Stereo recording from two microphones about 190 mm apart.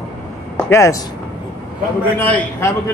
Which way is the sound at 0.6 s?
15° left (ahead or behind).